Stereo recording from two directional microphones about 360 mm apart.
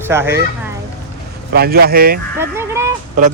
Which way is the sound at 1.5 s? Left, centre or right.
Right.